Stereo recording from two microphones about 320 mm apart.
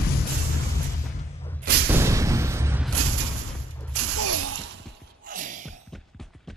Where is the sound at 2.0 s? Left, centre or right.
Centre.